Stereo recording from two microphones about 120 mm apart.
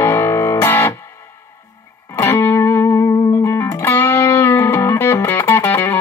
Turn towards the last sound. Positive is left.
turn(degrees=15)  # may be behind; listen again after turning